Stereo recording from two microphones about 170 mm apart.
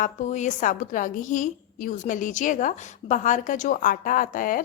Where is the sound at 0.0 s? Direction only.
45° left (ahead or behind).